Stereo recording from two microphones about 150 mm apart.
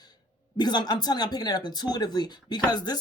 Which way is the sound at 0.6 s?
30° left (ahead or behind).